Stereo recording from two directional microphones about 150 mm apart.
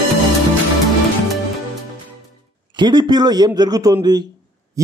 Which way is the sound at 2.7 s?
30° right (ahead or behind).